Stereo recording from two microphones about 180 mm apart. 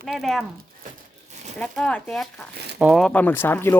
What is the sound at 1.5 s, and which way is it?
Speech, 5° left (ahead or behind).